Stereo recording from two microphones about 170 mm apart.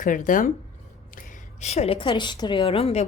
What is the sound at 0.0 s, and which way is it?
A woman's voice, 50° left (ahead or behind).